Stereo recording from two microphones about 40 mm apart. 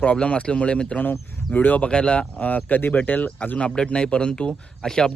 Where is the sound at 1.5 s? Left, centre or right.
Left.